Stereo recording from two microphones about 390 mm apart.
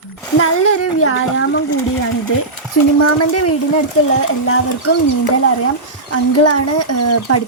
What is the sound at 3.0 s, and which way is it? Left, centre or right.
Speech, left.